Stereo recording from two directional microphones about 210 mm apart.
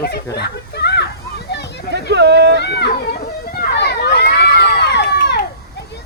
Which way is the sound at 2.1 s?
55° right (ahead or behind).